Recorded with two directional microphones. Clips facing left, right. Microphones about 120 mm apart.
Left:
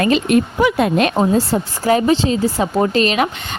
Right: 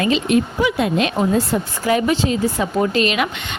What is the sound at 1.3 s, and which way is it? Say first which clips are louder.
A woman's voice: left 2 dB; 35° left (ahead or behind).